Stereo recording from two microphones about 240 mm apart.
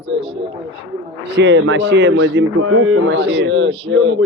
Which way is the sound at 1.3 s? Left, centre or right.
Right.